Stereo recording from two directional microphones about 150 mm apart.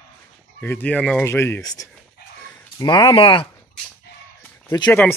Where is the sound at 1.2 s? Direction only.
15° left (ahead or behind); by 3.4 s 35° left (ahead or behind).